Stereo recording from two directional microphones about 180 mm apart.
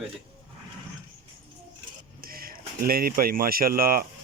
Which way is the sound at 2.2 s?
55° right (ahead or behind).